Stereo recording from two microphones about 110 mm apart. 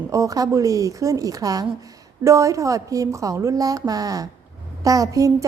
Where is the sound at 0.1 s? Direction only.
30° right (ahead or behind).